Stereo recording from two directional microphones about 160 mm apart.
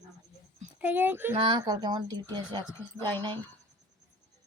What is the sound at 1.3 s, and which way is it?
Speech, 30° right (ahead or behind).